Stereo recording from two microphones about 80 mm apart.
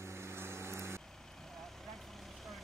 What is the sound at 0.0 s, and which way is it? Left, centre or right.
Vehicle, right.